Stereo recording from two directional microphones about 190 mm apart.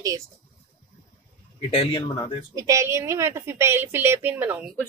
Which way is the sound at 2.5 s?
15° right (ahead or behind).